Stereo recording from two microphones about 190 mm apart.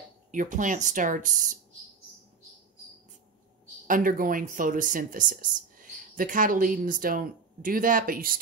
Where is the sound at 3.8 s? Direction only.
45° right (ahead or behind).